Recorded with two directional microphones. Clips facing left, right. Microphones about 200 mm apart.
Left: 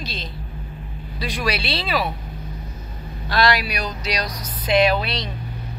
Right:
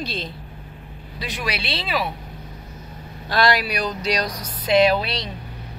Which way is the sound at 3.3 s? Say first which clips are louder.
Even; 50° right (ahead or behind).